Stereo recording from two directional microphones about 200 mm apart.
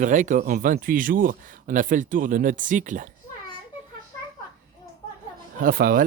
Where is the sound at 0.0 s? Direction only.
40° right (ahead or behind).